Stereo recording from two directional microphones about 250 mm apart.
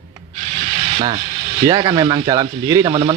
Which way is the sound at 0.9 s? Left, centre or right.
Centre.